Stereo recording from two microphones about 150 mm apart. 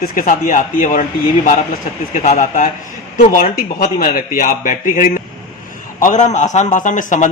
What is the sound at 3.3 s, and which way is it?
A man's voice, 70° left (ahead or behind).